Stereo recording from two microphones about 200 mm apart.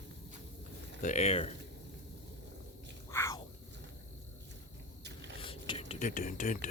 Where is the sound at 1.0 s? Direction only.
35° left (ahead or behind).